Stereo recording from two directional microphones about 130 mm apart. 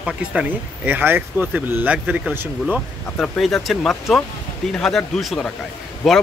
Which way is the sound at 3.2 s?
5° left (ahead or behind).